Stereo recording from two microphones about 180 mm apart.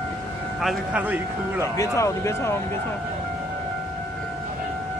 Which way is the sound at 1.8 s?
15° left (ahead or behind).